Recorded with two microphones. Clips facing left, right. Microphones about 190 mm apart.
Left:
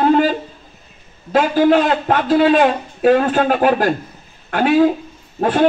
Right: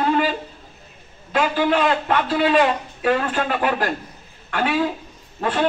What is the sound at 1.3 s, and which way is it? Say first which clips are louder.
A man's voice: left 6 dB; 45° left (ahead or behind).